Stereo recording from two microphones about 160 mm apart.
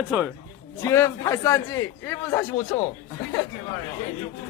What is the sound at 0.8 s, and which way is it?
A man's voice, 15° left (ahead or behind).